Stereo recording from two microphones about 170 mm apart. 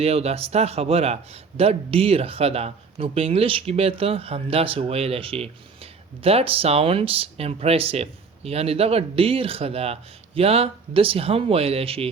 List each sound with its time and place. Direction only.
0.0 s a man's voice: 35° right (ahead or behind)